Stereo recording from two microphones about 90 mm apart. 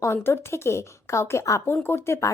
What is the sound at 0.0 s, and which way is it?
A woman's voice, 25° left (ahead or behind).